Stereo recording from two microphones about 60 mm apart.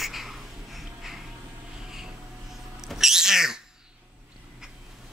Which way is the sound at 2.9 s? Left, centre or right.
Centre.